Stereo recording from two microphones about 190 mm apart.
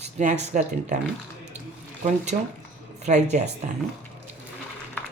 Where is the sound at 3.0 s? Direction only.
35° right (ahead or behind).